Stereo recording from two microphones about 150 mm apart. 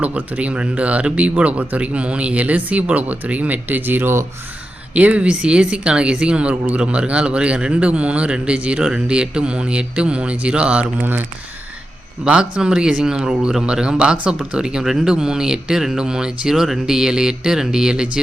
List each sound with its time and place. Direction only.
0.0 s speech: 10° right (ahead or behind)
12.2 s speech: 5° right (ahead or behind)